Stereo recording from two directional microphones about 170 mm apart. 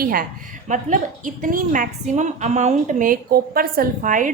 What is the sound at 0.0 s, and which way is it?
A woman's voice, 60° right (ahead or behind).